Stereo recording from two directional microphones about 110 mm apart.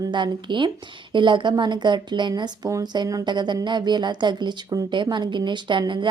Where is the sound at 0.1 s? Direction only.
45° right (ahead or behind).